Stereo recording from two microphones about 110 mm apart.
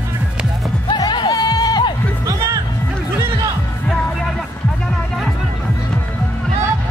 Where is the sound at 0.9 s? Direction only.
40° left (ahead or behind).